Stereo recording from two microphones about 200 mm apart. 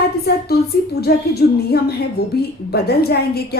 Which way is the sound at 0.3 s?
55° left (ahead or behind).